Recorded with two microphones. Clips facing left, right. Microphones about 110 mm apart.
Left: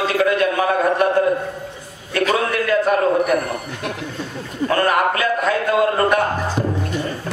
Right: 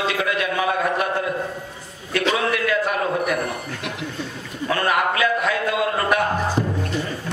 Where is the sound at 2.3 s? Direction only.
40° left (ahead or behind).